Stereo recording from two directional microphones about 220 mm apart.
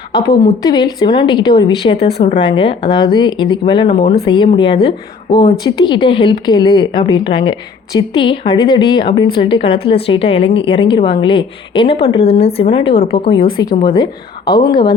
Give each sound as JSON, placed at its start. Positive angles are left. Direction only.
{"t": 0.1, "sound": "a woman's voice", "side_deg": 15}